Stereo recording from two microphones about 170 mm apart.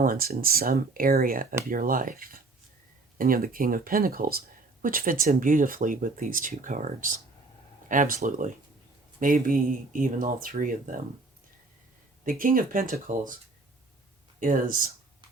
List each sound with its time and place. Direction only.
0.0 s speech: 60° right (ahead or behind)
12.2 s speech: 55° right (ahead or behind)